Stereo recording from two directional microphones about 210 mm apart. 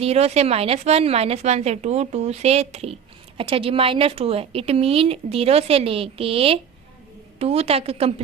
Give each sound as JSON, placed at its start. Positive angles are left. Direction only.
{"t": 0.0, "sound": "speech", "side_deg": -30}